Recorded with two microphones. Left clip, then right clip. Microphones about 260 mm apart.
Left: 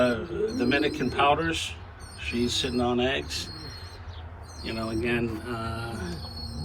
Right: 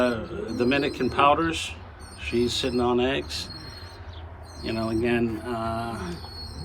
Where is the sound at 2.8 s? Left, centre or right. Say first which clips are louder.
Right 3 dB; right.